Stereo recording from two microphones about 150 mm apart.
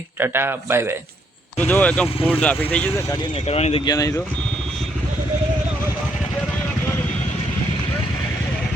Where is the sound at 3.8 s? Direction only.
20° left (ahead or behind).